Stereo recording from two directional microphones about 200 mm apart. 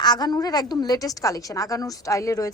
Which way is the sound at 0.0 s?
20° left (ahead or behind).